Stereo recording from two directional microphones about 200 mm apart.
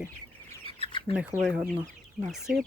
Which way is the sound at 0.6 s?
25° left (ahead or behind).